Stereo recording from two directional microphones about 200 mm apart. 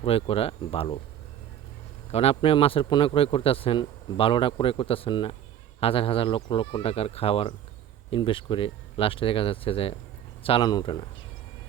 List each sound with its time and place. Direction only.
0.0 s a man's voice: 30° left (ahead or behind)
2.1 s a man's voice: 30° left (ahead or behind)